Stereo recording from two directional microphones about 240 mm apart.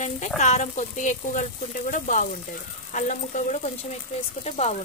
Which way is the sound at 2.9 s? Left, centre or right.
Left.